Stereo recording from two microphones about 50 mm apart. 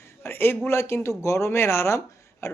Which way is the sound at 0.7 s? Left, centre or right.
Left.